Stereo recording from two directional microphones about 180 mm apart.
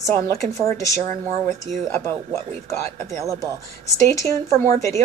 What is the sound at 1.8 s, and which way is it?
Speech, 15° left (ahead or behind).